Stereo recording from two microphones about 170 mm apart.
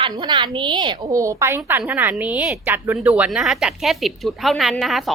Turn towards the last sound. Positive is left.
turn(degrees=0)  # may be behind; listen again after turning